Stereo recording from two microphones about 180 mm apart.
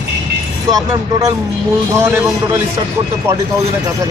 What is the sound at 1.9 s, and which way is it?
Speech, 15° right (ahead or behind).